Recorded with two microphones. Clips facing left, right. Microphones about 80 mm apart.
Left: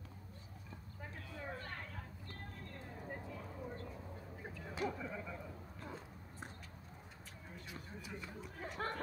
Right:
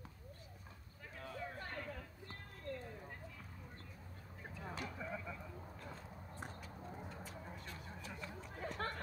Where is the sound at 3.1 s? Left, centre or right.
Left.